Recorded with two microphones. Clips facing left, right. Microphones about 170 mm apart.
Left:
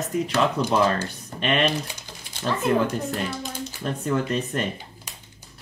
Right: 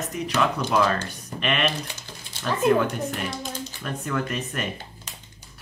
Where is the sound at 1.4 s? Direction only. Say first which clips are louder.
Left 3 dB; 30° left (ahead or behind).